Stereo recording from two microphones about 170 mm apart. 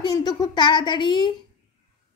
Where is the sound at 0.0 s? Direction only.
25° left (ahead or behind).